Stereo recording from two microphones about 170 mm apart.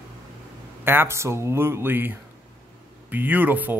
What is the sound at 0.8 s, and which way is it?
Speech, 15° right (ahead or behind).